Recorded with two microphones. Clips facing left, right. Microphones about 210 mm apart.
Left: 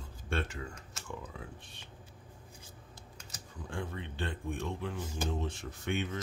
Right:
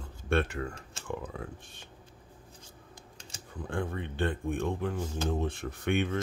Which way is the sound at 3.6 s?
55° right (ahead or behind).